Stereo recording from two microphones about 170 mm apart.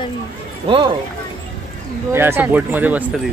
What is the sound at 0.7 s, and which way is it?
Speech, 30° right (ahead or behind).